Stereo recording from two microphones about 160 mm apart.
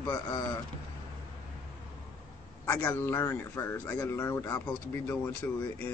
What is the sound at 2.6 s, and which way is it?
Speech, 10° left (ahead or behind).